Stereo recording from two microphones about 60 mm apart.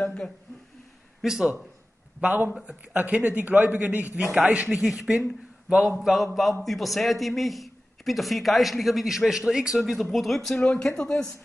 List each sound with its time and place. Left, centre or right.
0.0 s speech: centre
1.2 s speech: centre
2.2 s a man's voice: right
2.6 s a man's voice: centre
3.0 s a man's voice: right
4.5 s speech: centre
5.9 s a man's voice: centre
10.6 s speech: centre